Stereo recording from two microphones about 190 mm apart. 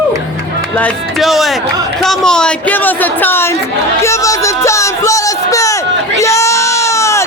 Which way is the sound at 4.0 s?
15° left (ahead or behind).